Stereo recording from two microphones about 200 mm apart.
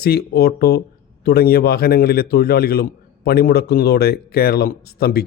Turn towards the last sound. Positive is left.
turn(degrees=50)  # may be behind; listen again after turning